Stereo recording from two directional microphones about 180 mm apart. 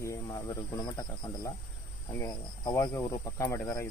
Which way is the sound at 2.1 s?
20° left (ahead or behind).